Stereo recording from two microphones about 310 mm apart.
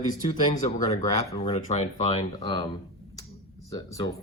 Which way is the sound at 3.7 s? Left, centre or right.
Centre.